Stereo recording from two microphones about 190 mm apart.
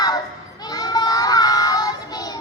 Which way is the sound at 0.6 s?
20° left (ahead or behind).